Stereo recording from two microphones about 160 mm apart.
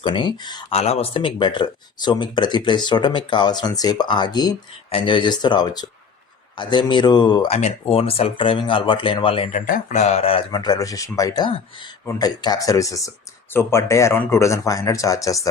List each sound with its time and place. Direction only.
0.0 s speech: 30° left (ahead or behind)
0.8 s speech: 40° left (ahead or behind)
7.4 s speech: 40° left (ahead or behind)
9.5 s speech: 55° left (ahead or behind); by 10.4 s 40° left (ahead or behind)
10.5 s speech: 25° left (ahead or behind)